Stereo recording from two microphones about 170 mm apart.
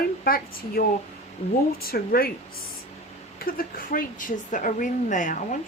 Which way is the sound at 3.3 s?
55° left (ahead or behind).